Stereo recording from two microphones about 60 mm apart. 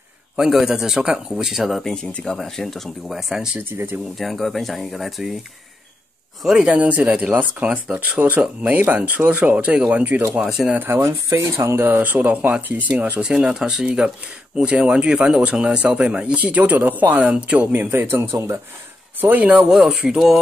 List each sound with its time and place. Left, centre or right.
0.4 s speech: centre
3.7 s a man's voice: right
4.2 s speech: centre
6.4 s speech: centre
10.9 s speech: right
12.0 s speech: right
13.2 s speech: centre
17.7 s a man's voice: right
19.2 s speech: right
19.7 s speech: centre